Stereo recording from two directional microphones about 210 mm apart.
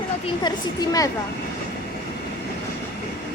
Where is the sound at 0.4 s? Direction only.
20° left (ahead or behind).